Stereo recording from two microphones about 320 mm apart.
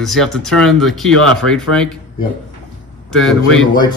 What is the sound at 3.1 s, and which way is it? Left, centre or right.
Speech, centre.